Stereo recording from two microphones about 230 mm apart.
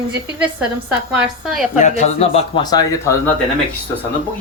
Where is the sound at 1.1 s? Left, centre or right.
Centre.